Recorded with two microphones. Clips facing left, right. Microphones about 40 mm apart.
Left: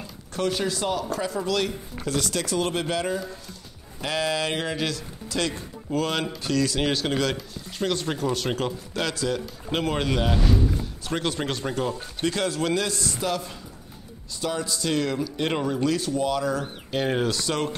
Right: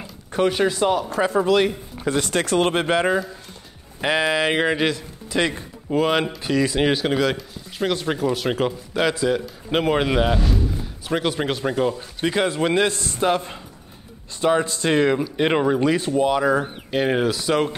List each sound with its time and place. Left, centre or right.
0.3 s speech: right
16.6 s speech: centre